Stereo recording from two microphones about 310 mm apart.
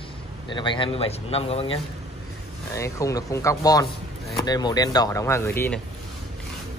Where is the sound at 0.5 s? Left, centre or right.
Centre.